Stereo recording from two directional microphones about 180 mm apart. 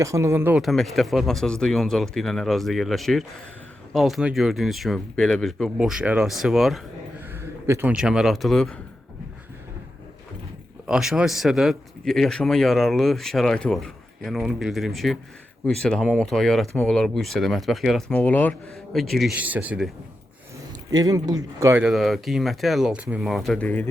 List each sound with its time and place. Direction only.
0.0 s speech: 15° right (ahead or behind)
0.6 s a man's voice: centre (ahead or behind)
7.3 s speech: 10° right (ahead or behind)
10.8 s a man's voice: 5° right (ahead or behind)
20.9 s speech: 20° right (ahead or behind)
21.8 s a man's voice: centre (ahead or behind)